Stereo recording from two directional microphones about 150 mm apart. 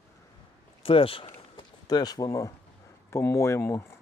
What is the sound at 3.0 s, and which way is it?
Speech, 20° left (ahead or behind).